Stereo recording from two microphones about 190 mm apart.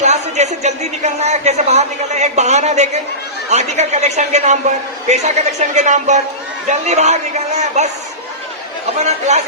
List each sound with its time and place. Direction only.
0.0 s a man's voice: 35° right (ahead or behind)
9.0 s a man's voice: 35° right (ahead or behind)